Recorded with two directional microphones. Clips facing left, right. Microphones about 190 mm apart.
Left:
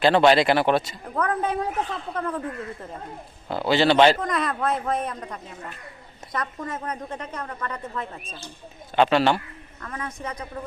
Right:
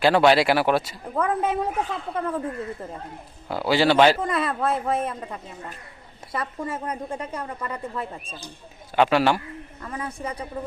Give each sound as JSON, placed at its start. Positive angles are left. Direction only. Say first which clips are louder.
{"t": 0.0, "sound": "speech", "louder": "even", "side_deg": -10}
{"t": 3.5, "sound": "speech", "louder": "even", "side_deg": -10}
{"t": 6.3, "sound": "speech", "louder": "right 1 dB", "side_deg": -10}
{"t": 10.2, "sound": "speech", "louder": "right 2 dB", "side_deg": -30}